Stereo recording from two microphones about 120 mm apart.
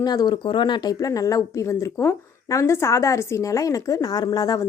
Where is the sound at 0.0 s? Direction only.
35° left (ahead or behind).